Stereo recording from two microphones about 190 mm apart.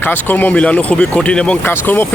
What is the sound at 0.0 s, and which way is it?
Speech, 10° left (ahead or behind).